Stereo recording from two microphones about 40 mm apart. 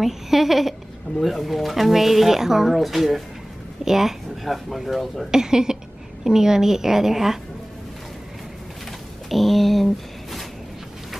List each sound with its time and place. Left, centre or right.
0.0 s a woman's voice: centre
5.3 s a woman's voice: centre
9.3 s a sound: centre